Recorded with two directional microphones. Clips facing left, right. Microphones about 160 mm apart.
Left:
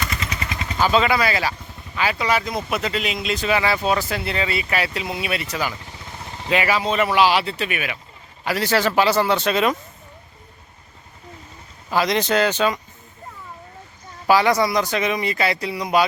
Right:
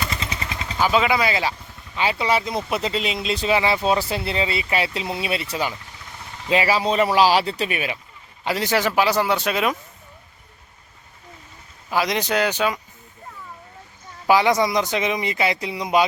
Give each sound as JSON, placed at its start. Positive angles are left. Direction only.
{"t": 0.0, "sound": "vehicle", "side_deg": -25}
{"t": 0.6, "sound": "speech", "side_deg": -10}
{"t": 8.4, "sound": "speech", "side_deg": -20}
{"t": 11.9, "sound": "speech", "side_deg": -10}
{"t": 14.3, "sound": "speech", "side_deg": -20}